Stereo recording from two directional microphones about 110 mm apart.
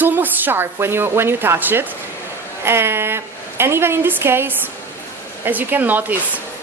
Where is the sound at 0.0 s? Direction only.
15° right (ahead or behind).